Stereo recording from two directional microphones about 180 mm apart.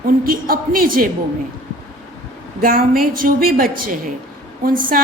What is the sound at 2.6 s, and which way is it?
A woman's voice, 55° right (ahead or behind).